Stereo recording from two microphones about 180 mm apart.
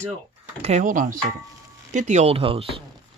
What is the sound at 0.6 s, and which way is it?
Speech, 40° right (ahead or behind).